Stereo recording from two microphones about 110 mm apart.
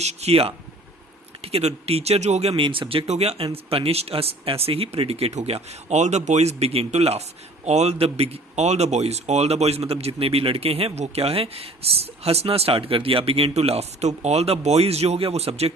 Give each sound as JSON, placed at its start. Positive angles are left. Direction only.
{"t": 0.0, "sound": "speech", "side_deg": -80}
{"t": 3.1, "sound": "speech", "side_deg": -70}